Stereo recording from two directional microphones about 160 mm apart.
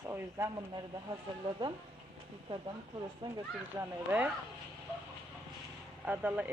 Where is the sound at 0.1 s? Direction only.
15° right (ahead or behind).